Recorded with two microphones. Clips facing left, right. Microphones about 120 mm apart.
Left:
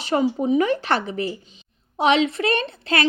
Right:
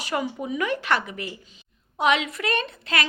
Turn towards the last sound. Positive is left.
turn(degrees=30)  # may be behind; listen again after turning